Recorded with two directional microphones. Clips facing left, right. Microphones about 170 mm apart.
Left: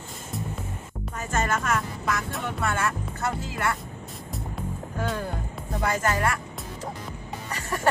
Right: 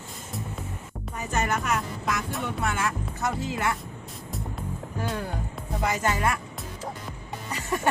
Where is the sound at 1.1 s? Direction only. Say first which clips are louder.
Left 1 dB; 15° right (ahead or behind).